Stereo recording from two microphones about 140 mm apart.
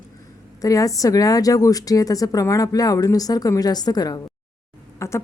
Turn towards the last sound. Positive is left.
turn(degrees=20)  # may be behind; listen again after turning